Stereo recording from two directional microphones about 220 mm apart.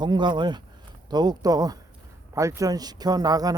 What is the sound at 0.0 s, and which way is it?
A man's voice, 20° right (ahead or behind).